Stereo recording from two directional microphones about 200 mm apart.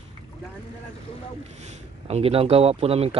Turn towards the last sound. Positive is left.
turn(degrees=-30)  # may be behind; listen again after turning